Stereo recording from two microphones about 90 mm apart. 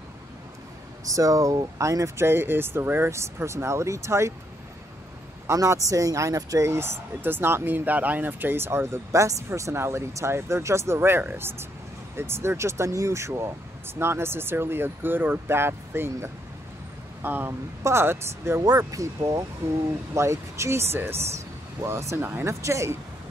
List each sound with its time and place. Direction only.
1.0 s speech: 40° right (ahead or behind)
5.5 s speech: 35° right (ahead or behind)